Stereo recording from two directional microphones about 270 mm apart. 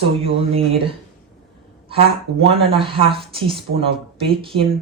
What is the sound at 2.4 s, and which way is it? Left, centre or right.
Speech, right.